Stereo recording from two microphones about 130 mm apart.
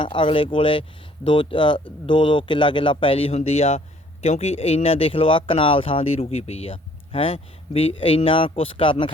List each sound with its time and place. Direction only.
0.0 s speech: 40° left (ahead or behind)